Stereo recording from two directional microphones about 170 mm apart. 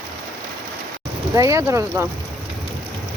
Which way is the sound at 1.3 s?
20° right (ahead or behind).